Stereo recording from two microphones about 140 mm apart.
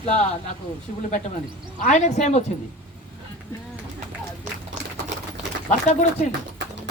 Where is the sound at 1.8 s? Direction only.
55° left (ahead or behind).